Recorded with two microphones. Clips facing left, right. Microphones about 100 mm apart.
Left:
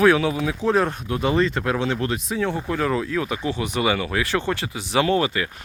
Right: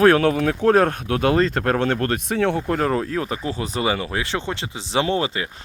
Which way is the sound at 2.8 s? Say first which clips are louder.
Right 1 dB; 40° right (ahead or behind).